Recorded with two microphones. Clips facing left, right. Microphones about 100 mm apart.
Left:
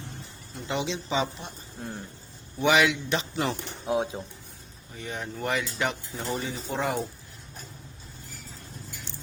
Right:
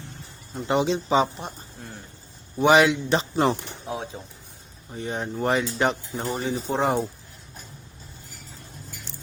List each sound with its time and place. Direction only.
0.5 s speech: 45° right (ahead or behind)
2.6 s speech: 35° right (ahead or behind)
3.8 s speech: 10° left (ahead or behind)
4.9 s speech: 35° right (ahead or behind)